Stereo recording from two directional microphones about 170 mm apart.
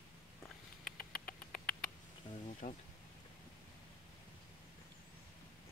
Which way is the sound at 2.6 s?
50° left (ahead or behind).